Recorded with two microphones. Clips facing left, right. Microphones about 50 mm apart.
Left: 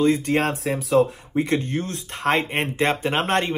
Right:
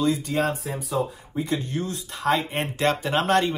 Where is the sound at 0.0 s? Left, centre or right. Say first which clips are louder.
Left 4 dB; left.